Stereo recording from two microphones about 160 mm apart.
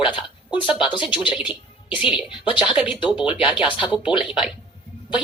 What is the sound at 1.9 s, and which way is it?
Speech, 5° right (ahead or behind).